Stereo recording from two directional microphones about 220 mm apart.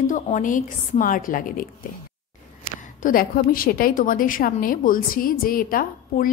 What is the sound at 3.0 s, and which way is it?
A woman's voice, 40° left (ahead or behind).